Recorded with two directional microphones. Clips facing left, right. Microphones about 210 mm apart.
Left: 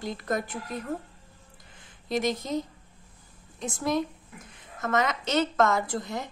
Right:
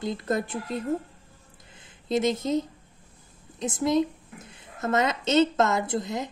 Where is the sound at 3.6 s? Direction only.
20° right (ahead or behind).